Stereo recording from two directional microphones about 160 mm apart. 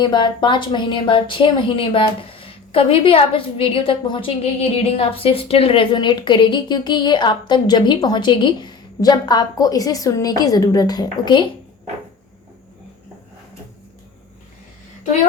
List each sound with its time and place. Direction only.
0.0 s a woman's voice: 30° left (ahead or behind)